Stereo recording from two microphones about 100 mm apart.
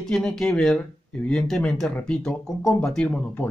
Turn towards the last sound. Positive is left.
turn(degrees=10)  # may be behind; listen again after turning